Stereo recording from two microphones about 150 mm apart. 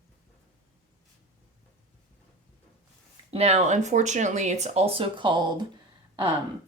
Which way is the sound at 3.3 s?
45° right (ahead or behind).